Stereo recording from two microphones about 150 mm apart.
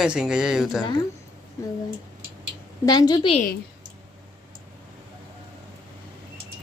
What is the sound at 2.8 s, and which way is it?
Speech, 25° left (ahead or behind).